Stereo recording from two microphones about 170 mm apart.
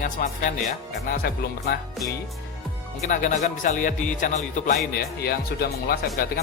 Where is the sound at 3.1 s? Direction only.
50° left (ahead or behind).